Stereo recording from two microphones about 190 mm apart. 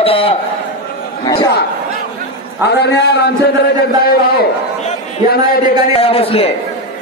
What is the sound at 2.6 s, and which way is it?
Speech, 60° left (ahead or behind).